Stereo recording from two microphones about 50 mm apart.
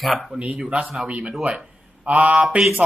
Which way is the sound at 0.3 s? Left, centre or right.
Right.